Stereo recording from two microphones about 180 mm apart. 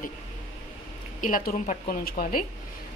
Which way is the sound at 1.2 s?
50° left (ahead or behind).